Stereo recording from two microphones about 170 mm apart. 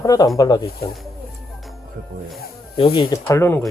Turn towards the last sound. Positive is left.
turn(degrees=15)  # may be behind; listen again after turning